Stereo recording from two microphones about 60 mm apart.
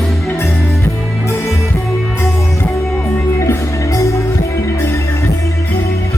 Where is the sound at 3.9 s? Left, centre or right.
Left.